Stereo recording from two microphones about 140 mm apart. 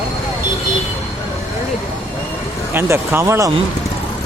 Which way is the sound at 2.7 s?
15° right (ahead or behind).